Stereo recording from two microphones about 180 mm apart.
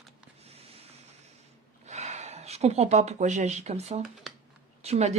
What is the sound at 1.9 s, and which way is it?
Speech, 40° right (ahead or behind).